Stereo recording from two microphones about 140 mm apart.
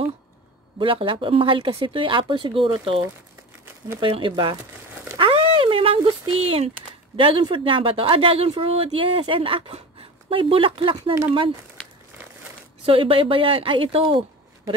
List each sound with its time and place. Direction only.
0.7 s speech: 40° right (ahead or behind)
5.1 s a sound: 40° right (ahead or behind)
7.2 s speech: 40° right (ahead or behind)
12.8 s speech: 40° right (ahead or behind)